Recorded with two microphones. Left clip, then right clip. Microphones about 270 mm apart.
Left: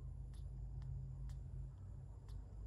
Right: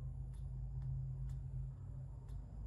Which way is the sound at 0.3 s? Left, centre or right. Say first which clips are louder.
Right 5 dB; left.